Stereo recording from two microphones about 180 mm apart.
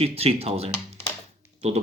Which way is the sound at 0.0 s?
35° right (ahead or behind).